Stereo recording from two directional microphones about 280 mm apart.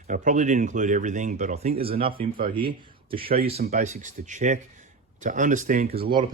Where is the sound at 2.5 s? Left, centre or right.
Centre.